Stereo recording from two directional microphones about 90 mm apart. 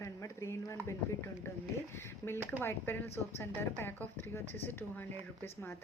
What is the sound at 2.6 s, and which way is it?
A woman's voice, 25° left (ahead or behind).